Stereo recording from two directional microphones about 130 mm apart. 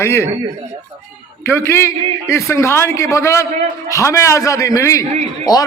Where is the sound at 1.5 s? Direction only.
20° left (ahead or behind).